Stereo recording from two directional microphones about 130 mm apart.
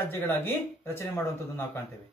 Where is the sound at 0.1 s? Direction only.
15° left (ahead or behind).